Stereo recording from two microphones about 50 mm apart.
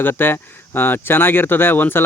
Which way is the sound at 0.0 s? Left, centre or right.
Left.